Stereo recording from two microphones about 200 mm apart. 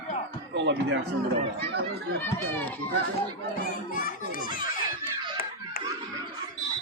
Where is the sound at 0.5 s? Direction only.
60° right (ahead or behind).